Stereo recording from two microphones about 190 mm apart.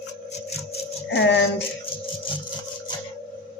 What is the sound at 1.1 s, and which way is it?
Music, 70° left (ahead or behind).